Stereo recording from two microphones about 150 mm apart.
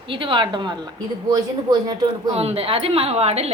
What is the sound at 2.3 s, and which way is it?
A woman's voice, 40° right (ahead or behind).